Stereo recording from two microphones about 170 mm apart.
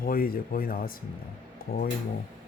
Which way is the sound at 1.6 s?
60° left (ahead or behind).